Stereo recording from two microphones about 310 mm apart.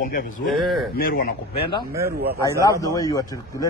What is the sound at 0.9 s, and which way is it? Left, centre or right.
Speech, left.